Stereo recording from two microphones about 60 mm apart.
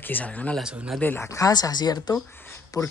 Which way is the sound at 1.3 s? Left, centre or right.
Left.